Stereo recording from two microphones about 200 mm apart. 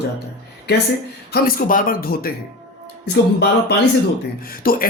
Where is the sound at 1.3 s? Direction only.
45° left (ahead or behind).